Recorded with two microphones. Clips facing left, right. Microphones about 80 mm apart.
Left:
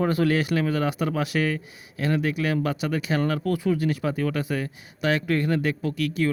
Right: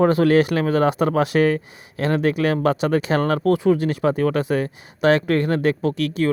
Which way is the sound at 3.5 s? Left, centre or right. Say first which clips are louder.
Right 6 dB; right.